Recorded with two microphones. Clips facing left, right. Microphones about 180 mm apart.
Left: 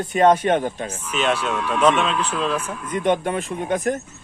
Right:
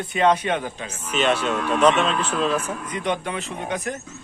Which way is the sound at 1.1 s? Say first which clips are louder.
Right 1 dB; 5° left (ahead or behind).